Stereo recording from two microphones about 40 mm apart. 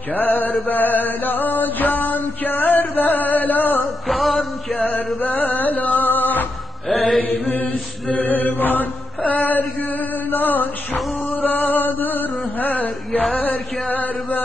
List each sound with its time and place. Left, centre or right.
0.1 s mantra: left
0.7 s a sound: left
4.1 s music: centre
4.7 s music: left
6.9 s mantra: centre
7.5 s a capella: left
8.3 s mantra: left
9.2 s music: left
11.2 s a sound: left